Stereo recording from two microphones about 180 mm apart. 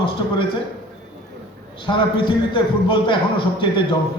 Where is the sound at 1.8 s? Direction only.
25° left (ahead or behind).